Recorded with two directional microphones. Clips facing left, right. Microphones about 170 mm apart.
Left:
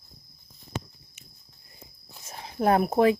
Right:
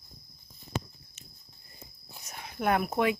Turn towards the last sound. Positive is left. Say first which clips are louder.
# left 6 dB
turn(degrees=35)  # may be behind; listen again after turning